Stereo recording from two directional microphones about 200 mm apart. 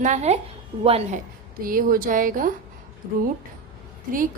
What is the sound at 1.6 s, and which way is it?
Speech, 45° right (ahead or behind).